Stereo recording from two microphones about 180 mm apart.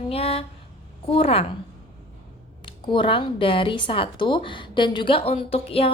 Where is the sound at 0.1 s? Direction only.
35° left (ahead or behind).